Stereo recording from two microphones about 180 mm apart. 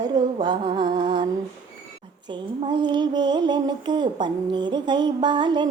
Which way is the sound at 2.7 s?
25° right (ahead or behind).